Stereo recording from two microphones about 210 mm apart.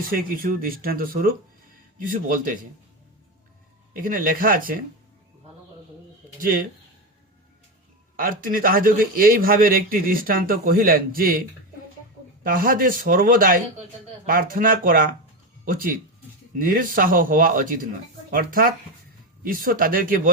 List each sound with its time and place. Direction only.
0.1 s a man's voice: 45° right (ahead or behind)
3.9 s a man's voice: 40° right (ahead or behind)
6.4 s a man's voice: 45° right (ahead or behind)
8.1 s a man's voice: 40° right (ahead or behind)